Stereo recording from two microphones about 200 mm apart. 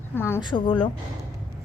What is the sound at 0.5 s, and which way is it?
Speech, 25° left (ahead or behind).